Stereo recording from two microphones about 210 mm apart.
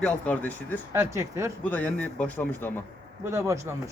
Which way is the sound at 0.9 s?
15° right (ahead or behind).